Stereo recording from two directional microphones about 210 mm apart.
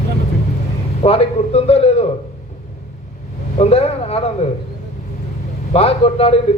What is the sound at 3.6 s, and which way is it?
Speech, 30° left (ahead or behind).